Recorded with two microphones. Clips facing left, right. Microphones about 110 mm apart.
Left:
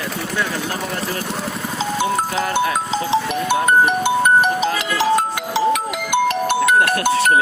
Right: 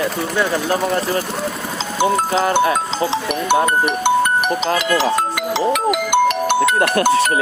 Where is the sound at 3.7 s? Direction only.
80° right.